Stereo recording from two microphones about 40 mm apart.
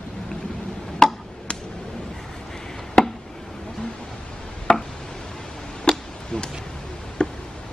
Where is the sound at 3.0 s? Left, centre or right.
Centre.